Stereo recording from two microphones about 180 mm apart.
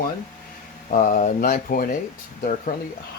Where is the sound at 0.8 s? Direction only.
45° left (ahead or behind).